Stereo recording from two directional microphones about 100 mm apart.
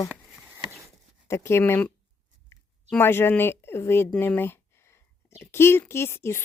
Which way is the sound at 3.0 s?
20° left (ahead or behind).